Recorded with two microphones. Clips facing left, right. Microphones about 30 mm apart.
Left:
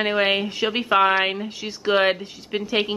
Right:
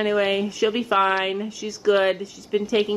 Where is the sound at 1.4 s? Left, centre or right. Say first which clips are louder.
Right 2 dB; left.